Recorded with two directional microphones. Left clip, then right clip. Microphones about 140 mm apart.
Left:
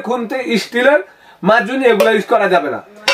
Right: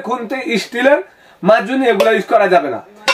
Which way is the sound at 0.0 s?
20° right (ahead or behind).